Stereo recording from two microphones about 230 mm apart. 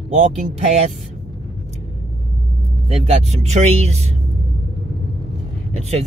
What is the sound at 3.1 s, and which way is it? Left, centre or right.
Speech, right.